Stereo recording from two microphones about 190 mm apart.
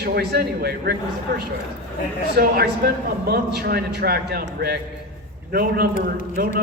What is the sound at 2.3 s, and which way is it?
A man's voice, 55° right (ahead or behind).